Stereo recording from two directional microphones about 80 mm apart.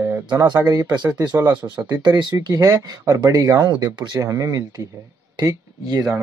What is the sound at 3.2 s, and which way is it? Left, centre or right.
Speech, right.